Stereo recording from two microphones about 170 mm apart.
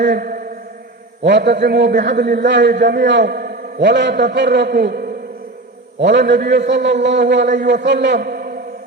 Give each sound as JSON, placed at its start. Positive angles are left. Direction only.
{"t": 0.0, "sound": "a man's voice", "side_deg": -70}
{"t": 1.2, "sound": "a man's voice", "side_deg": -90}
{"t": 6.0, "sound": "a man's voice", "side_deg": -90}